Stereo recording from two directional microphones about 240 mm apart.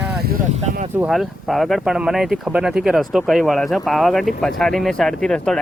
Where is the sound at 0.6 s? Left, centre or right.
Right.